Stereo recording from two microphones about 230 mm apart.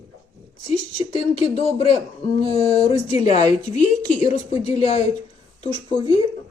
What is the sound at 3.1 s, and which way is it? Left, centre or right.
A woman's voice, left.